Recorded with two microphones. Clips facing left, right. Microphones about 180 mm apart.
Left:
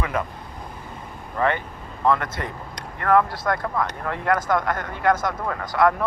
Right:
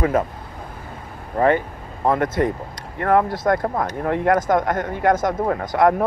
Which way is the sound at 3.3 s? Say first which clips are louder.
Right 6 dB; 45° right (ahead or behind).